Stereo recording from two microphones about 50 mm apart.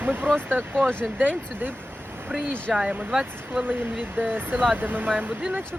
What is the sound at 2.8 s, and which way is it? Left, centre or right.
Speech, right.